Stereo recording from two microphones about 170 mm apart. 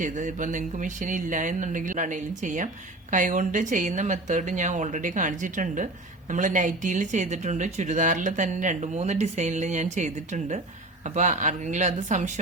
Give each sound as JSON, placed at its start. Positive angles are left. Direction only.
{"t": 0.0, "sound": "a woman's voice", "side_deg": -50}